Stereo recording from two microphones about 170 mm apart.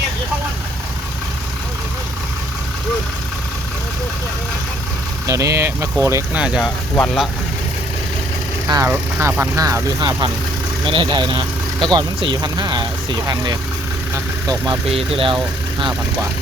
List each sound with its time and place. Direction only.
5.2 s speech: 20° right (ahead or behind)
6.4 s speech: 5° right (ahead or behind)
6.9 s speech: 5° left (ahead or behind)
8.6 s speech: 20° right (ahead or behind)
14.8 s speech: 35° right (ahead or behind)